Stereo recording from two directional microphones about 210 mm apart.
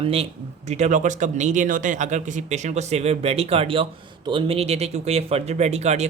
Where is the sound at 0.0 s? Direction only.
25° right (ahead or behind).